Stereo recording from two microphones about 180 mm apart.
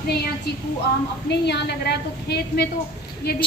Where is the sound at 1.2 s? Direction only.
70° left (ahead or behind).